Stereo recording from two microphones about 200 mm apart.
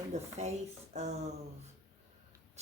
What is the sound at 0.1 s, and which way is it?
Speech, 35° right (ahead or behind).